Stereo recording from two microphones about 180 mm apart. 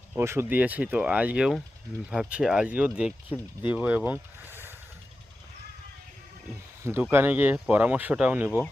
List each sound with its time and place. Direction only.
0.1 s speech: 15° right (ahead or behind)
6.8 s speech: 10° right (ahead or behind)